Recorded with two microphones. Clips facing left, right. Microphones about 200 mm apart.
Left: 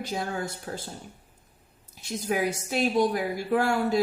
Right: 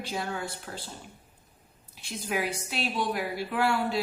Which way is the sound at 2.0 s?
45° left (ahead or behind).